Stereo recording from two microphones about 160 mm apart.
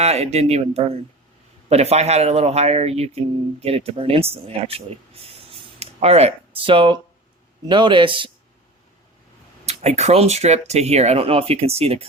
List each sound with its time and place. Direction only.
0.0 s speech: 40° right (ahead or behind)
9.6 s speech: 40° right (ahead or behind)